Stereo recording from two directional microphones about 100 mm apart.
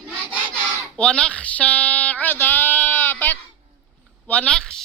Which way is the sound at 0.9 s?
10° left (ahead or behind).